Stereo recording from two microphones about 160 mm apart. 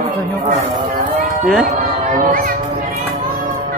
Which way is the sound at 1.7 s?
50° right (ahead or behind).